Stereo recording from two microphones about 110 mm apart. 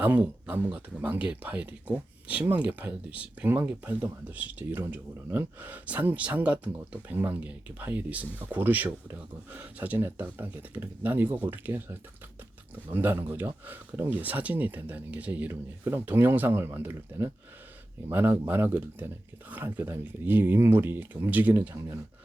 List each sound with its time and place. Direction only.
0.0 s speech: 15° right (ahead or behind)